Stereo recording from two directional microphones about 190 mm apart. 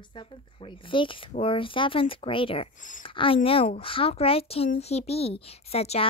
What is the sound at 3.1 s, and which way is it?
A woman's voice, 25° left (ahead or behind).